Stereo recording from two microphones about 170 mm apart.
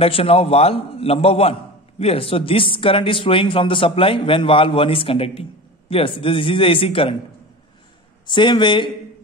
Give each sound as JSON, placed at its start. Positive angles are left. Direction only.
{"t": 0.0, "sound": "a man's voice", "side_deg": 35}
{"t": 8.3, "sound": "speech", "side_deg": 25}